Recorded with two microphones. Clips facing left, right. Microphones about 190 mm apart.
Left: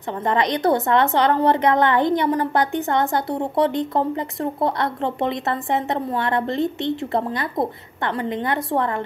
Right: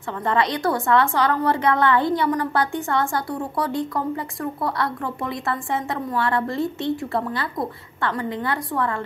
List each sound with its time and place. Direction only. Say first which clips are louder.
0.3 s a woman's voice: left 3 dB; 20° left (ahead or behind)